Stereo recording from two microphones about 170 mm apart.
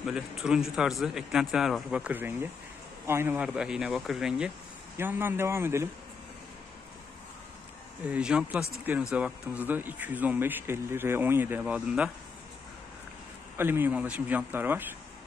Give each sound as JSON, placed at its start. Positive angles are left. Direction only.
{"t": 0.0, "sound": "speech", "side_deg": -5}
{"t": 4.9, "sound": "speech", "side_deg": -15}
{"t": 8.1, "sound": "speech", "side_deg": -5}
{"t": 13.6, "sound": "speech", "side_deg": -10}